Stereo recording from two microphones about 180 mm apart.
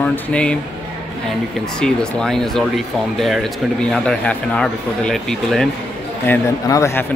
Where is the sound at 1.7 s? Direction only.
5° left (ahead or behind).